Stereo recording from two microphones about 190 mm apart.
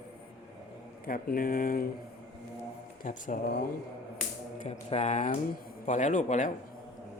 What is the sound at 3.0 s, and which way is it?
Speech, 45° left (ahead or behind).